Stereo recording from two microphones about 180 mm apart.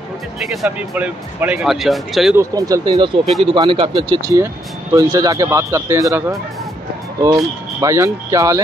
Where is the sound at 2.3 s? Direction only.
20° right (ahead or behind).